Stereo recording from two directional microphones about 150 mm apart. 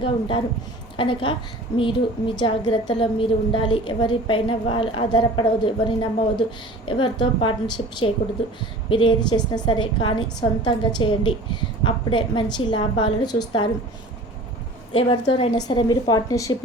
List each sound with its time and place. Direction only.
0.0 s a woman's voice: 35° left (ahead or behind)
8.9 s a woman's voice: 35° left (ahead or behind)
14.9 s a woman's voice: 35° left (ahead or behind)